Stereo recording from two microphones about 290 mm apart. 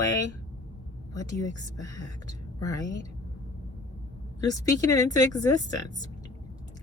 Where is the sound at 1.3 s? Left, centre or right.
Right.